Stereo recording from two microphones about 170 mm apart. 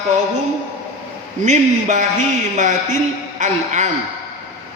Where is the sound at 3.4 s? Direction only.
45° right (ahead or behind).